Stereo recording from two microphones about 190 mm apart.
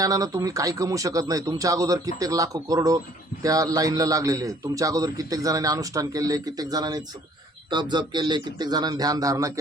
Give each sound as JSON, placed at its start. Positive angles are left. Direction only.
{"t": 0.0, "sound": "a man's voice", "side_deg": -20}